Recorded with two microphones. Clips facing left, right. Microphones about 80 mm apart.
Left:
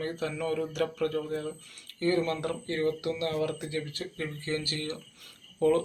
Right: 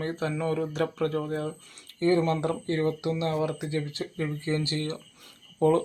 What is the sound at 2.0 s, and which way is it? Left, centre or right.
Speech, right.